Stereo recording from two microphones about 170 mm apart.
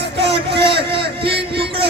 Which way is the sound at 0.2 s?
75° right (ahead or behind).